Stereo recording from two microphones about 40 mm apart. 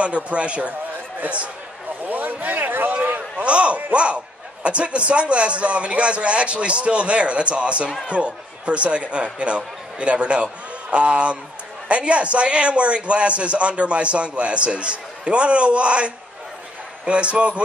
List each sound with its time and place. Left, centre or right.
0.0 s speech: right
2.0 s a sound: right
3.4 s a man's voice: right